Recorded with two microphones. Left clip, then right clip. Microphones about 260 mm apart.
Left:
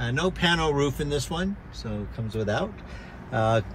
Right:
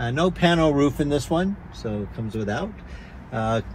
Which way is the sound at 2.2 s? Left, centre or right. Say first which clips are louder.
Left 2 dB; centre.